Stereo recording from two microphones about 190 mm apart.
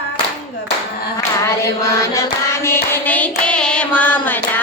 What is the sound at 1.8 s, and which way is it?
Hands, 15° left (ahead or behind).